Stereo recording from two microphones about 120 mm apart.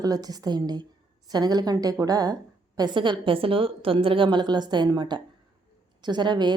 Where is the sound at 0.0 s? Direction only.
30° right (ahead or behind).